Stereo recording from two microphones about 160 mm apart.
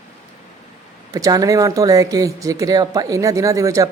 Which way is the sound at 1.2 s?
20° right (ahead or behind).